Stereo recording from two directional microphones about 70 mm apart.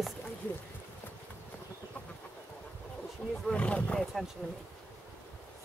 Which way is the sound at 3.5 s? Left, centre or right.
Centre.